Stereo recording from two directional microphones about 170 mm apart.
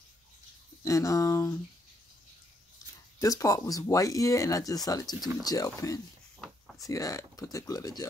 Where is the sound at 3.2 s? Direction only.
20° left (ahead or behind).